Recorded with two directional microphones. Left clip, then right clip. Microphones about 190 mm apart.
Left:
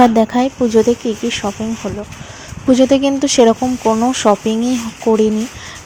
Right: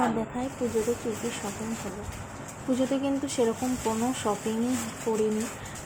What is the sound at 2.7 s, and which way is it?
Speech, 40° left (ahead or behind).